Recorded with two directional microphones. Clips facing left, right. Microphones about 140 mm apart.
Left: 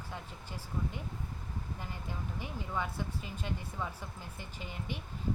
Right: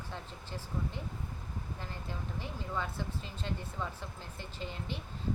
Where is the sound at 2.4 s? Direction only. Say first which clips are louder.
Left 1 dB; 10° left (ahead or behind).